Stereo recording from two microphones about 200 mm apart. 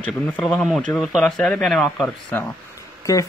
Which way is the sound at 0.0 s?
5° left (ahead or behind).